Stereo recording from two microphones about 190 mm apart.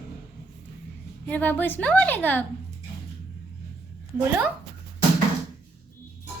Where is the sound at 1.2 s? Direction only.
10° left (ahead or behind).